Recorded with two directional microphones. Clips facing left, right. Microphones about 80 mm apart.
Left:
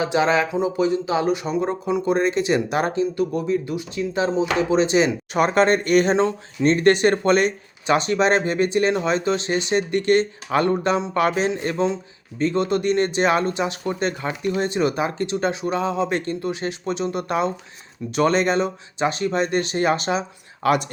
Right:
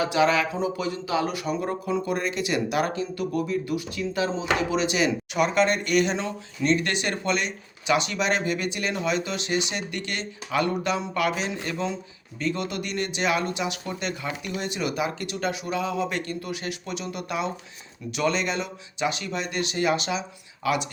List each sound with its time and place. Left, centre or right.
0.0 s speech: left